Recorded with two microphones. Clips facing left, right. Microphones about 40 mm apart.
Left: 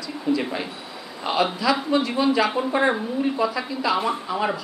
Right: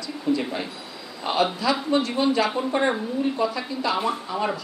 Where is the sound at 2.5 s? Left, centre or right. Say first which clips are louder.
Left 2 dB; centre.